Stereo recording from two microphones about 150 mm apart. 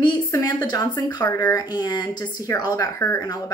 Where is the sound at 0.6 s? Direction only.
25° left (ahead or behind).